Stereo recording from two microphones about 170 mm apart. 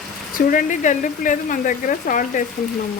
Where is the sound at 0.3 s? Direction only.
50° left (ahead or behind).